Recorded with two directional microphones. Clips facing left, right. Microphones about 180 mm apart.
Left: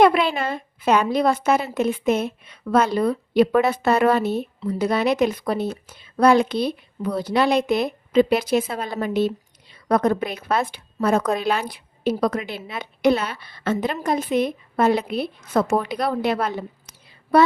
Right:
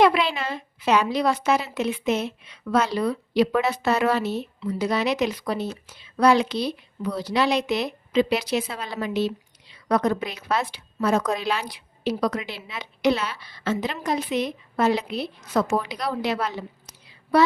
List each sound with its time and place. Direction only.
0.0 s a woman's voice: 50° left (ahead or behind)